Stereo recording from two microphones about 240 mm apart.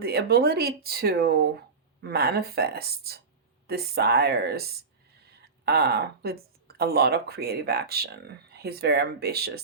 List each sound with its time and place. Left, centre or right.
0.0 s speech: right